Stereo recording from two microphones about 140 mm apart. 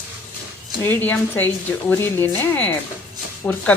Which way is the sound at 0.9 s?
15° left (ahead or behind).